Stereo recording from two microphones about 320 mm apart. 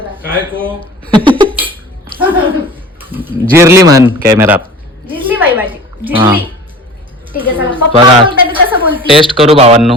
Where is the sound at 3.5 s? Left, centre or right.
Centre.